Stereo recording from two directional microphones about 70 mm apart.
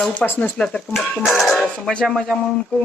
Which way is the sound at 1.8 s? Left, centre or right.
Centre.